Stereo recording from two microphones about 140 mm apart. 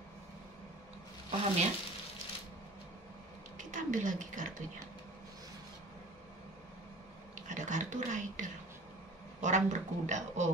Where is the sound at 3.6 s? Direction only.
65° right (ahead or behind).